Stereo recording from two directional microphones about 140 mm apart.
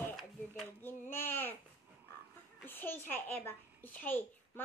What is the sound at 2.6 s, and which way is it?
A child's voice, 15° left (ahead or behind).